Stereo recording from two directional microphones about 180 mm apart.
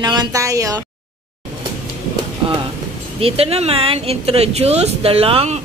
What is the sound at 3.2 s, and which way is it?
Speech, 35° right (ahead or behind).